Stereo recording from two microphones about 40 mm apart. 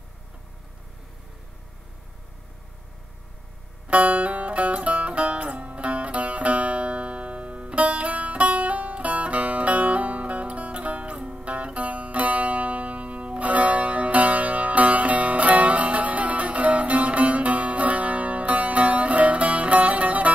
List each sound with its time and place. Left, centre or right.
3.8 s music: right
11.1 s music: right